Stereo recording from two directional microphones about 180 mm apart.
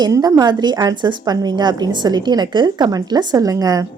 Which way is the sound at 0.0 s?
20° right (ahead or behind).